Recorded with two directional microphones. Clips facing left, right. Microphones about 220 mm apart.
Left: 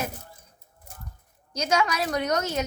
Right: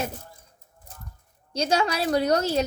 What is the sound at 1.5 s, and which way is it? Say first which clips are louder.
A woman's voice: right 1 dB; 30° right (ahead or behind).